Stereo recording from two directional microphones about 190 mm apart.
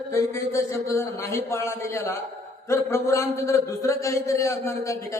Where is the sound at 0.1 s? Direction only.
15° left (ahead or behind).